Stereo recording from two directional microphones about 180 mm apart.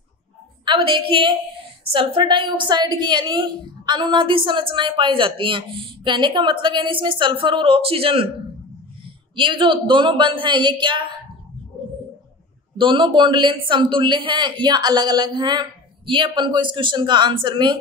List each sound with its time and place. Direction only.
0.7 s a woman's voice: 30° right (ahead or behind)
9.3 s a woman's voice: 25° right (ahead or behind)
12.7 s a woman's voice: 25° right (ahead or behind)